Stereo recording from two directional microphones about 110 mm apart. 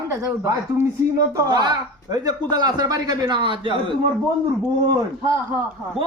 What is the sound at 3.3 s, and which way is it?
Speech, 50° right (ahead or behind).